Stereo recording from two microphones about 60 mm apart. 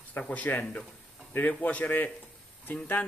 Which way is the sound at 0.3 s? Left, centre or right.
Left.